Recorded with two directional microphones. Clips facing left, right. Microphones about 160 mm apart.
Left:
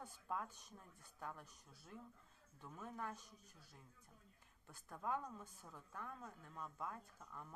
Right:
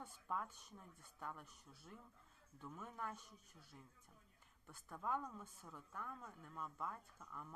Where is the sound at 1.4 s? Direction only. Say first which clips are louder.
Right 1 dB; 35° left (ahead or behind).